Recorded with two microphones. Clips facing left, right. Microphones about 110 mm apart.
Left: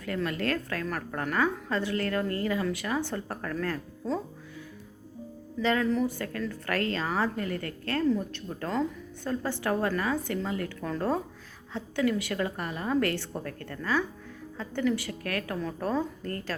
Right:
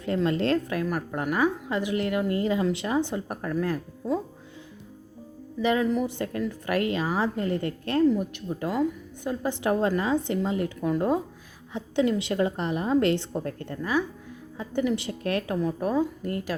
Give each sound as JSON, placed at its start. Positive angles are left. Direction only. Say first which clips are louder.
{"t": 0.0, "sound": "a woman's voice", "louder": "right 5 dB", "side_deg": -25}
{"t": 5.5, "sound": "a woman's voice", "louder": "right 2 dB", "side_deg": -15}